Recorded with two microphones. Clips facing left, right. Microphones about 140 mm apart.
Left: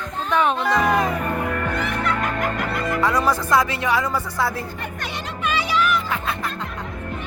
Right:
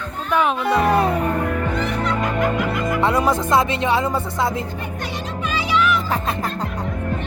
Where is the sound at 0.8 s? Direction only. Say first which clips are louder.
Right 3 dB; 35° right (ahead or behind).